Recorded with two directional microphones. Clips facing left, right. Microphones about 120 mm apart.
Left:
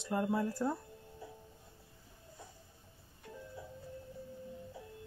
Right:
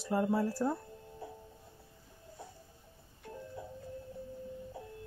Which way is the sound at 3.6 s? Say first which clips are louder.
Right 4 dB; 55° right (ahead or behind).